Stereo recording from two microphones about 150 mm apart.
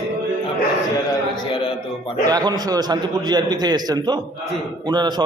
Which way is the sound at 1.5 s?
35° left (ahead or behind).